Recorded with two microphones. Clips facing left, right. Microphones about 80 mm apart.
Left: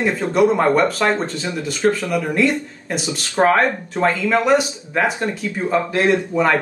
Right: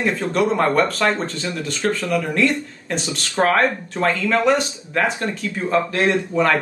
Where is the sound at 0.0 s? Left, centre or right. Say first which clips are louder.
Left 3 dB; centre.